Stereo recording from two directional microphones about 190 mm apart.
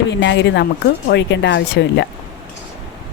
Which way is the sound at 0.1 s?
70° left (ahead or behind).